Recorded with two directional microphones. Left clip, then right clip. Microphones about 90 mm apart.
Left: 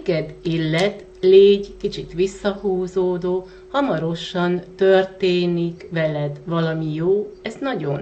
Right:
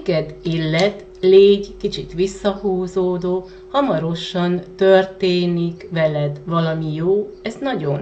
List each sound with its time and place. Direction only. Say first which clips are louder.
0.0 s speech: right 2 dB; 20° left (ahead or behind)